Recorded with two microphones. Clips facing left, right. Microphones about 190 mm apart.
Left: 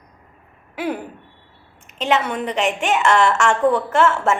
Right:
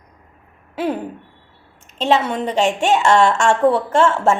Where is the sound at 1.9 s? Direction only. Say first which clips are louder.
Right 3 dB; 30° right (ahead or behind).